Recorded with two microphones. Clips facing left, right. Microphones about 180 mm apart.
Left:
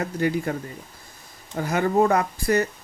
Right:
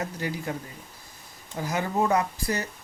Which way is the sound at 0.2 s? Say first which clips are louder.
Left 8 dB; 60° left (ahead or behind).